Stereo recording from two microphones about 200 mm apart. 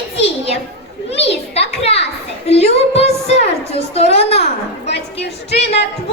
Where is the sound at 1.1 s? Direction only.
30° left (ahead or behind).